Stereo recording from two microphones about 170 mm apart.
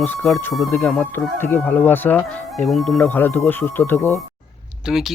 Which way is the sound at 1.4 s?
15° left (ahead or behind).